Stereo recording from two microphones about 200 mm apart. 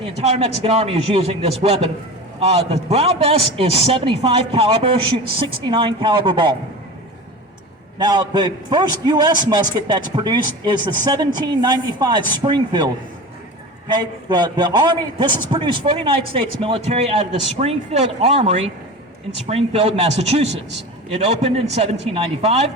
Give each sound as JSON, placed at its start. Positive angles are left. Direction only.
{"t": 0.0, "sound": "a man's voice", "side_deg": -30}
{"t": 7.9, "sound": "a man's voice", "side_deg": -20}